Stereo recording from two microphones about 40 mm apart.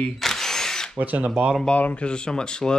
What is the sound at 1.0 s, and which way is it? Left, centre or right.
Speech, right.